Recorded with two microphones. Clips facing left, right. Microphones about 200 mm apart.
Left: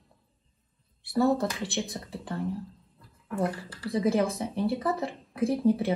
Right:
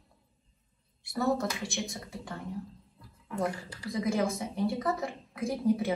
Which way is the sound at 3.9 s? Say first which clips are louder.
Left 4 dB; 30° left (ahead or behind).